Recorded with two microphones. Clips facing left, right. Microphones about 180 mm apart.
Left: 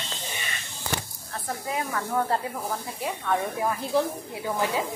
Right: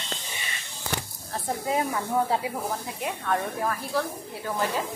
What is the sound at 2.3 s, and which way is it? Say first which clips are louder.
Speech: right 1 dB; centre (ahead or behind).